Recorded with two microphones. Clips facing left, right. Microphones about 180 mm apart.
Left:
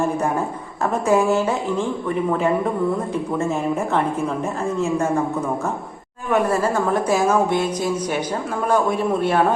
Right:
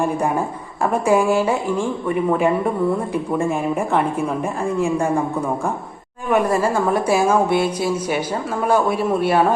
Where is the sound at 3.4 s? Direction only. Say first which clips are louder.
Even; 15° right (ahead or behind).